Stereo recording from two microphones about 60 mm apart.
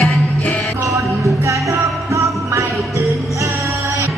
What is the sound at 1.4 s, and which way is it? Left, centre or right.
Music, right.